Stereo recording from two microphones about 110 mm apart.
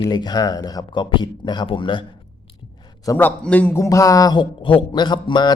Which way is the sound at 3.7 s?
30° left (ahead or behind).